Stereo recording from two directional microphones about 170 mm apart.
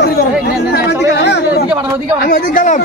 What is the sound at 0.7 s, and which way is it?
Speech, 85° left.